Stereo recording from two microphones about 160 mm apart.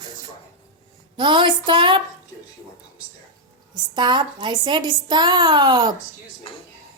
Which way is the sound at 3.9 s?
30° right (ahead or behind).